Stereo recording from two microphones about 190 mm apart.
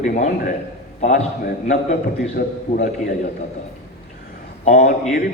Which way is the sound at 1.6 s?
40° left (ahead or behind).